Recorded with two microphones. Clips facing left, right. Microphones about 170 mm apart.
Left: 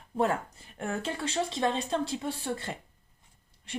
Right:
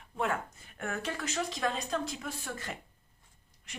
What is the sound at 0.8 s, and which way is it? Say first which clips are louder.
Speech: left 3 dB; 25° left (ahead or behind).